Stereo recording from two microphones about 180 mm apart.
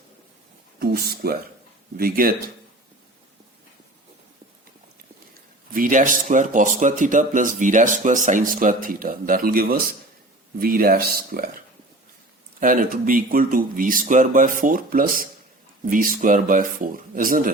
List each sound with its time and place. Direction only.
0.8 s speech: 60° right (ahead or behind)
5.7 s speech: 45° right (ahead or behind)